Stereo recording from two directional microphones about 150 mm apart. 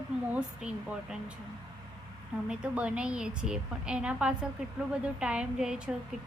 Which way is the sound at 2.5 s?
5° right (ahead or behind).